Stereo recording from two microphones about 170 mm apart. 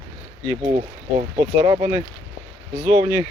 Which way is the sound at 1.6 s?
20° right (ahead or behind).